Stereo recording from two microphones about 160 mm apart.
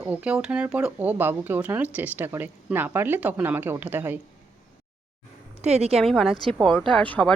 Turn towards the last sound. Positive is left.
turn(degrees=5)  # may be behind; listen again after turning